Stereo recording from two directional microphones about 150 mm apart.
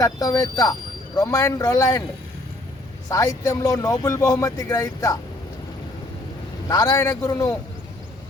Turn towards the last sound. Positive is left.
turn(degrees=25)  # may be behind; listen again after turning